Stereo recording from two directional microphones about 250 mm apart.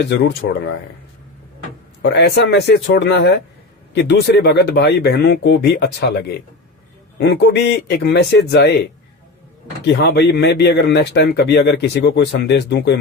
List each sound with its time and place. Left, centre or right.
0.0 s speech: left
2.0 s speech: left
9.8 s speech: left